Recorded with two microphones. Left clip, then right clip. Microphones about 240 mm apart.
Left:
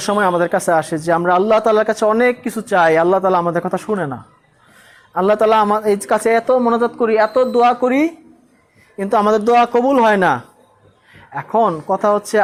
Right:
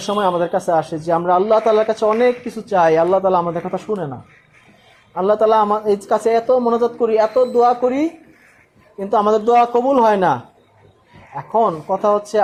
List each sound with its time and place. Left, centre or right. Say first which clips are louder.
0.0 s speech: left 2 dB; left